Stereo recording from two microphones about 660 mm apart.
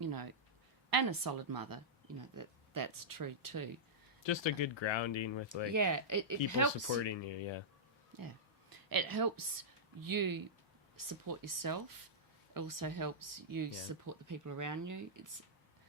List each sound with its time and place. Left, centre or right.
0.0 s a sound: right
0.9 s speech: right
4.2 s speech: left
5.7 s speech: right
6.9 s speech: left
8.1 s a sound: right
8.7 s a woman's voice: right